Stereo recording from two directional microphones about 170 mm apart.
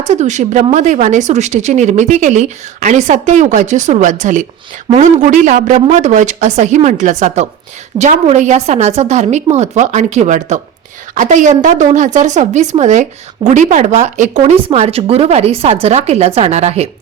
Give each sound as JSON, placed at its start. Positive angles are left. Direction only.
{"t": 0.1, "sound": "a woman's voice", "side_deg": -45}